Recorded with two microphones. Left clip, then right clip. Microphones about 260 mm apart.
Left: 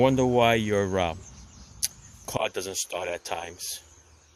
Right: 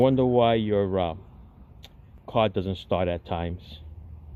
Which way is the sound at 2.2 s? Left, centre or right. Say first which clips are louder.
Right 5 dB; centre.